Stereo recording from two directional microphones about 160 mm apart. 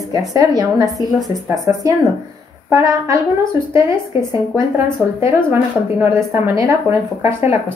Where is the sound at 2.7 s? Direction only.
20° right (ahead or behind).